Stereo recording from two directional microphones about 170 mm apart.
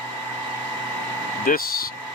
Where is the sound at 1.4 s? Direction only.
55° left (ahead or behind).